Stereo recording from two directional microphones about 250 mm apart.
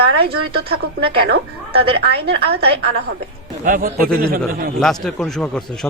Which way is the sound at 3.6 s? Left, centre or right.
Right.